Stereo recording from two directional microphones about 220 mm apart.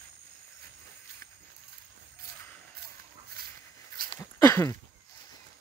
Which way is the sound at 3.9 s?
40° right (ahead or behind).